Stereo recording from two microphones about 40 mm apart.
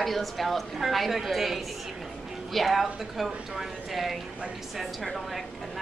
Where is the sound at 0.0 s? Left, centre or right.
Centre.